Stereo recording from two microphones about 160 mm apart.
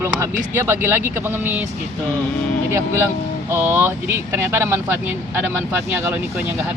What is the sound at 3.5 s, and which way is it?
Speech, 15° right (ahead or behind).